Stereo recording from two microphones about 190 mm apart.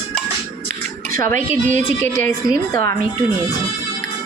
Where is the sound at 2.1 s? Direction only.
15° left (ahead or behind).